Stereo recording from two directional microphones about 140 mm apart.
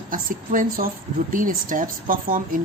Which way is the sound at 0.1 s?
75° right (ahead or behind).